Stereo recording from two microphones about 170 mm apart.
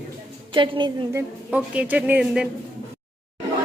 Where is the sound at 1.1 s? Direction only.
10° right (ahead or behind).